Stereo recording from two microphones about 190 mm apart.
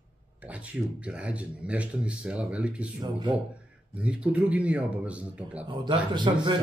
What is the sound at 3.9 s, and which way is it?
Speech, 5° right (ahead or behind).